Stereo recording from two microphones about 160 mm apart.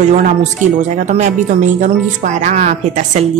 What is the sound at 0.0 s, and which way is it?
Speech, 45° right (ahead or behind).